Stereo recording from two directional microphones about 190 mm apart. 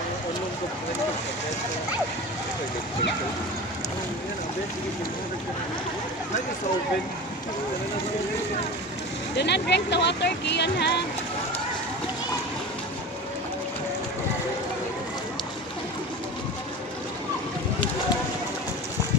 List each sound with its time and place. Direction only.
9.4 s speech: 65° left (ahead or behind)